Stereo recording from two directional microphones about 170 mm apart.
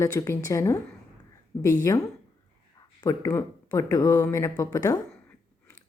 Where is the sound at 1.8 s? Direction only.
15° left (ahead or behind).